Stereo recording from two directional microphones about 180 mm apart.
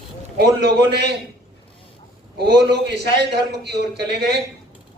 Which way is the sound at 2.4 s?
70° right (ahead or behind).